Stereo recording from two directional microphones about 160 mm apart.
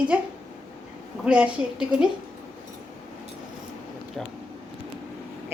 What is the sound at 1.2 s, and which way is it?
Speech, 5° right (ahead or behind).